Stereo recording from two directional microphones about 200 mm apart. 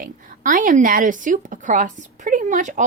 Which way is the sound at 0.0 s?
40° right (ahead or behind).